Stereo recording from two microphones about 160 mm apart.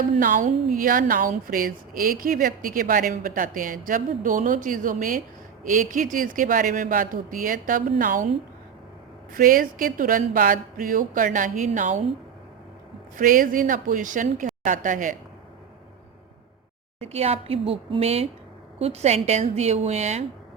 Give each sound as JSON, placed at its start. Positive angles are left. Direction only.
{"t": 0.2, "sound": "a woman's voice", "side_deg": -55}
{"t": 9.3, "sound": "a woman's voice", "side_deg": -60}
{"t": 13.1, "sound": "a woman's voice", "side_deg": -60}
{"t": 17.0, "sound": "a woman's voice", "side_deg": -40}